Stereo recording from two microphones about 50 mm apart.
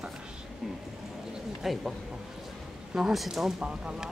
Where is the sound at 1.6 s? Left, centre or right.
Centre.